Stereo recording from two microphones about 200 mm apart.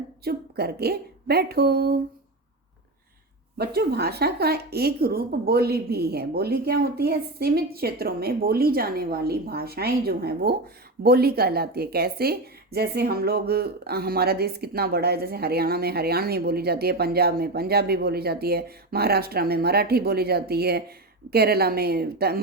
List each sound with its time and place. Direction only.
0.3 s a woman's voice: 55° right (ahead or behind)
3.6 s a woman's voice: 55° right (ahead or behind)